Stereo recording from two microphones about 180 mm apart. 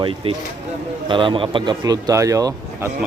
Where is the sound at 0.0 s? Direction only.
30° right (ahead or behind).